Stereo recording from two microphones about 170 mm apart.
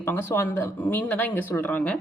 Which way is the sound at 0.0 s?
15° left (ahead or behind).